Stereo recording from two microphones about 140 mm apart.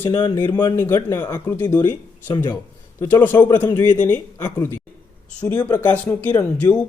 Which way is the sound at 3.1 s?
15° left (ahead or behind).